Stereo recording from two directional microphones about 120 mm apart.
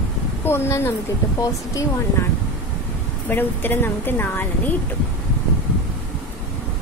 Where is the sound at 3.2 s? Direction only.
15° left (ahead or behind).